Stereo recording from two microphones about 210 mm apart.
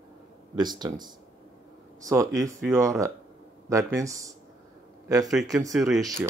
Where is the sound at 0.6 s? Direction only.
20° right (ahead or behind).